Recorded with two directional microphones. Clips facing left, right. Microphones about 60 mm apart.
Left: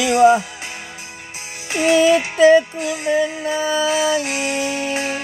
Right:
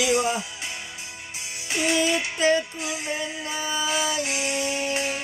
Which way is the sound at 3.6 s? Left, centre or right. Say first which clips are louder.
Left 8 dB; left.